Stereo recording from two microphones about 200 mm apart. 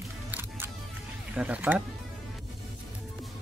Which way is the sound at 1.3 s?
5° right (ahead or behind).